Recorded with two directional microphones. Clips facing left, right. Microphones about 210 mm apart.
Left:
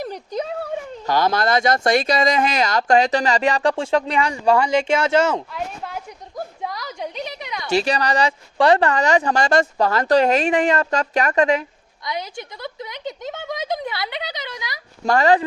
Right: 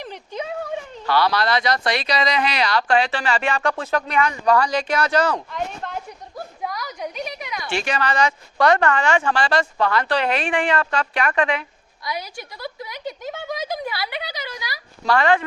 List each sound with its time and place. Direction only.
0.0 s speech: 40° left (ahead or behind)
5.5 s a sound: 5° left (ahead or behind)
6.7 s a sound: 25° left (ahead or behind)
7.7 s speech: 40° left (ahead or behind)
12.0 s speech: 20° left (ahead or behind)
15.0 s speech: 40° left (ahead or behind)